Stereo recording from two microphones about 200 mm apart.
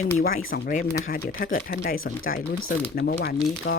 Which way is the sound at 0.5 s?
45° left (ahead or behind).